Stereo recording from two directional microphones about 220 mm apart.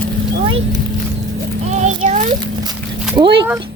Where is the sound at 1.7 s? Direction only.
30° right (ahead or behind).